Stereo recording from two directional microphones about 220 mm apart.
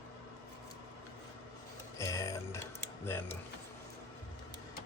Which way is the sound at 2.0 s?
15° left (ahead or behind).